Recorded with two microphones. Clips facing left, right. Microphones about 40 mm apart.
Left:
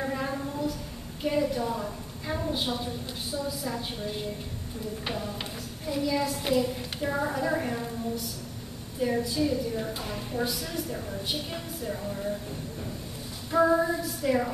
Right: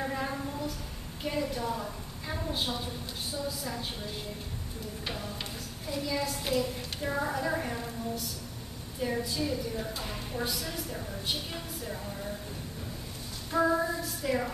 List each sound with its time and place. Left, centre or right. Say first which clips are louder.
0.0 s a sound: left 2 dB; centre
1.2 s a woman's voice: left 5 dB; centre
5.4 s a woman's voice: left 3 dB; centre
13.5 s a woman's voice: left 4 dB; centre